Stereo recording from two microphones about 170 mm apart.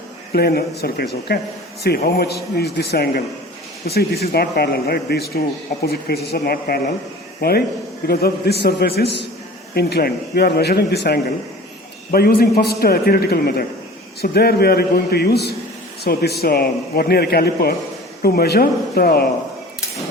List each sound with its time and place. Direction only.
0.3 s a man's voice: 65° left (ahead or behind)
12.1 s a man's voice: 65° left (ahead or behind)